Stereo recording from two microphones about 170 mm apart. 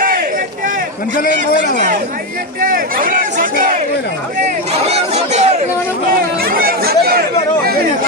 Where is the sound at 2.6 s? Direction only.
55° right (ahead or behind).